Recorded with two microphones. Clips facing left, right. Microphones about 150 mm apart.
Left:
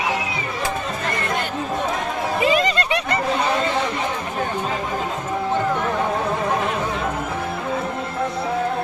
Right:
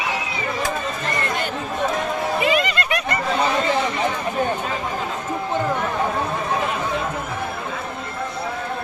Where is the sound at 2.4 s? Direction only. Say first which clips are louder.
Left 4 dB; 35° left (ahead or behind).